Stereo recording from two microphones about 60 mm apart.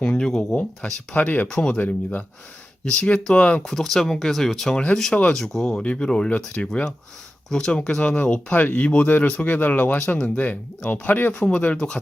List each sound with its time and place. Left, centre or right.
0.0 s speech: centre
1.5 s speech: centre
1.8 s speech: left
2.8 s speech: centre
3.6 s speech: centre